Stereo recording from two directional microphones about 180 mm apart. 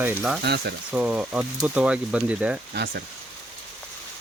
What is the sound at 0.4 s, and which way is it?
Speech, 70° right (ahead or behind).